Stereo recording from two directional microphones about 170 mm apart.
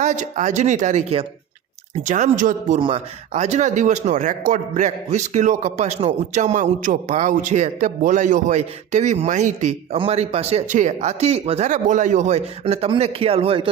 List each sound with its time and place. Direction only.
0.0 s a man's voice: 45° right (ahead or behind)
2.8 s a man's voice: 35° right (ahead or behind)